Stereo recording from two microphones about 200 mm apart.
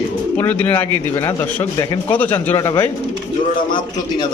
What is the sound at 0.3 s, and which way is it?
A man's voice, 10° left (ahead or behind).